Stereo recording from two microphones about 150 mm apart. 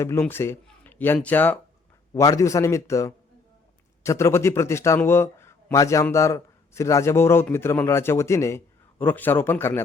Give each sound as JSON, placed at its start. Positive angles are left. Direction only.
{"t": 0.0, "sound": "a man's voice", "side_deg": 15}